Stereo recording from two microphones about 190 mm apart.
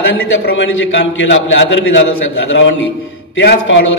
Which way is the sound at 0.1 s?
80° left.